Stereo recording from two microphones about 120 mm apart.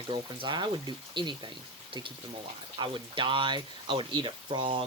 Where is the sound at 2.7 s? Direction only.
40° right (ahead or behind).